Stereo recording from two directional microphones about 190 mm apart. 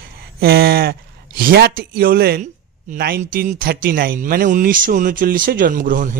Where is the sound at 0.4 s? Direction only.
55° right (ahead or behind).